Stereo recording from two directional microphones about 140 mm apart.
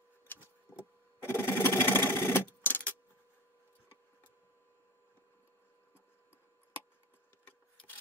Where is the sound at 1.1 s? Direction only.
15° left (ahead or behind).